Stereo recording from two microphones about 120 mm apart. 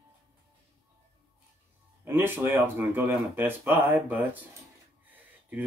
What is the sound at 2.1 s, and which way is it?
Speech, 20° right (ahead or behind).